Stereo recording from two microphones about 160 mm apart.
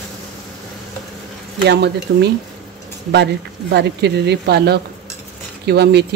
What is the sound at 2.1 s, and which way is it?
Speech, 90° right.